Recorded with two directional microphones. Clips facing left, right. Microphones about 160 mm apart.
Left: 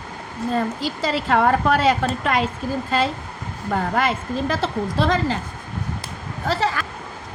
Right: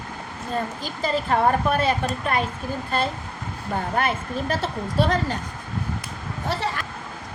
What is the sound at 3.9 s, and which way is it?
A woman's voice, 90° left.